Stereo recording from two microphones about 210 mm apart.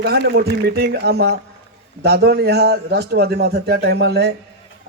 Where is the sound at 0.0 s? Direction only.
50° right (ahead or behind).